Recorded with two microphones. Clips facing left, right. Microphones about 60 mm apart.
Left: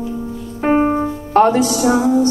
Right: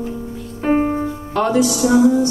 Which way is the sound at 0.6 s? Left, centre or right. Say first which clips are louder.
Left 2 dB; left.